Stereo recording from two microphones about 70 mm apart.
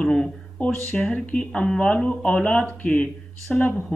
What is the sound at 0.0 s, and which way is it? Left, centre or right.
Speech, centre.